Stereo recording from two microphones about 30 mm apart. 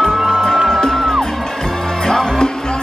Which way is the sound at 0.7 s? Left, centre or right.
Centre.